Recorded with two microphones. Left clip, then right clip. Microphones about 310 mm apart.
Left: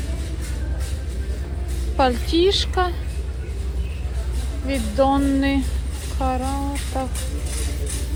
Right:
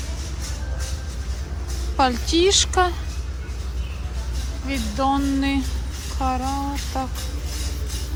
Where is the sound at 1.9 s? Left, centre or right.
Centre.